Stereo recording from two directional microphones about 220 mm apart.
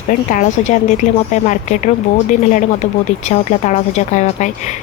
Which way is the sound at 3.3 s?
30° left (ahead or behind).